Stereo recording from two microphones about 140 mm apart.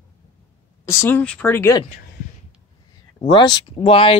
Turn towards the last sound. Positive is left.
turn(degrees=40)  # may be behind; listen again after turning